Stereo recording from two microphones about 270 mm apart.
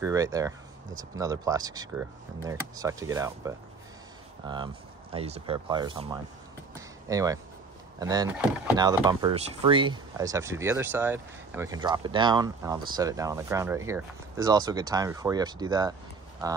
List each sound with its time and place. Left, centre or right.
0.0 s speech: centre
6.7 s a sound: centre
8.0 s speech: centre